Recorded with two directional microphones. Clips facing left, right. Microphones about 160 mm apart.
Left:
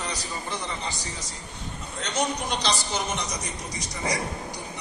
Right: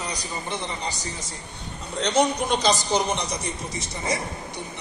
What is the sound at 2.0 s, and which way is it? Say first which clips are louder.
Speech: right 8 dB; 70° right (ahead or behind).